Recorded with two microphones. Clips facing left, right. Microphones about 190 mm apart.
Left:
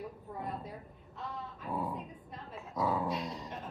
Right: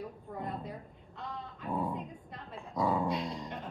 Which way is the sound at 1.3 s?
5° left (ahead or behind).